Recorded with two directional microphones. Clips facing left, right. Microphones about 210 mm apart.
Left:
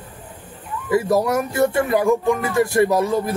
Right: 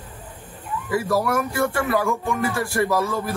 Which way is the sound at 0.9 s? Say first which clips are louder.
Left 4 dB; 20° left (ahead or behind).